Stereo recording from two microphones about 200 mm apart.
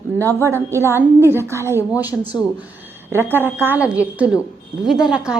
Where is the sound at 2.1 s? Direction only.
5° left (ahead or behind).